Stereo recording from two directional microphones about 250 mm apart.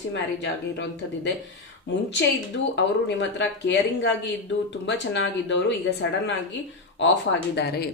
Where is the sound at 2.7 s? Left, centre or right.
Left.